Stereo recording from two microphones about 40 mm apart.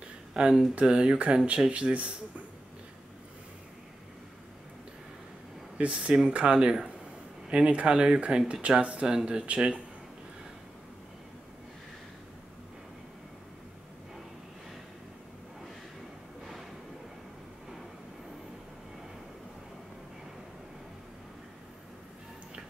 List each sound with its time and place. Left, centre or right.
0.3 s speech: right
5.8 s speech: right
7.4 s speech: right